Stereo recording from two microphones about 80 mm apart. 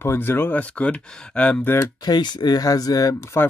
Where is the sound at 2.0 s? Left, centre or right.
Left.